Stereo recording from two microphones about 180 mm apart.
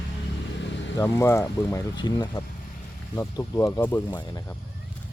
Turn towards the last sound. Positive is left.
turn(degrees=15)  # may be behind; listen again after turning